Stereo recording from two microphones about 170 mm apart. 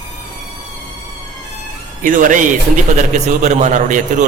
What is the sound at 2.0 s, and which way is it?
A man's voice, 50° right (ahead or behind).